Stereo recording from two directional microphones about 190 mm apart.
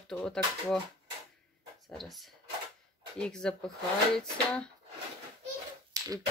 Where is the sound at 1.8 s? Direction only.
Centre (ahead or behind).